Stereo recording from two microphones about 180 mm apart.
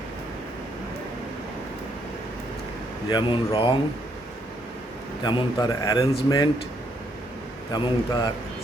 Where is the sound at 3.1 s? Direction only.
25° left (ahead or behind).